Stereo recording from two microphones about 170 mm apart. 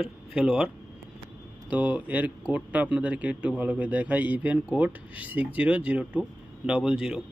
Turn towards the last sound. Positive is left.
turn(degrees=-5)  # may be behind; listen again after turning